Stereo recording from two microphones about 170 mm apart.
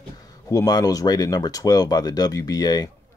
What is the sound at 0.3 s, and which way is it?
Speech, 20° left (ahead or behind).